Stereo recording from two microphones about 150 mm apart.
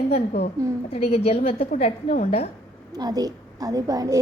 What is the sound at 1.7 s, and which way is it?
Speech, 55° left (ahead or behind).